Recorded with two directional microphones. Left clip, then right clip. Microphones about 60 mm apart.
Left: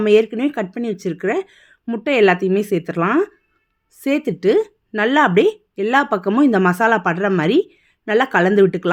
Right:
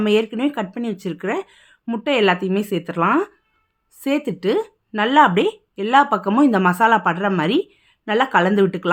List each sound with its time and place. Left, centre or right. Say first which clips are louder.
0.0 s speech: left 4 dB; left
4.0 s speech: left 3 dB; left